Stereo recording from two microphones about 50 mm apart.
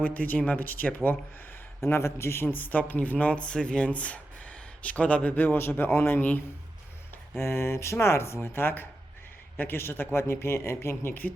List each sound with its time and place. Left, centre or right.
0.0 s speech: left
0.6 s speech: left
1.8 s speech: left
5.5 s speech: left
7.3 s speech: left
8.4 s speech: left